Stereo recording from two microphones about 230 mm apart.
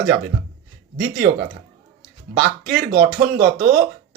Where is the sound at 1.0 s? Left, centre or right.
Right.